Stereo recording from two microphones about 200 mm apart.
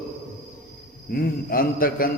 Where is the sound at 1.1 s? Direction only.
45° left (ahead or behind).